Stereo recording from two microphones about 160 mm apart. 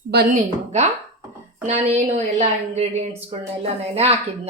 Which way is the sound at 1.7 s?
45° right (ahead or behind).